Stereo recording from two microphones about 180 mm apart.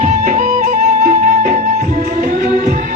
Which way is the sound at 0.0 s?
45° right (ahead or behind).